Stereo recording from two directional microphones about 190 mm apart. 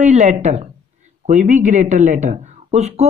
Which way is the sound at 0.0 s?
40° right (ahead or behind).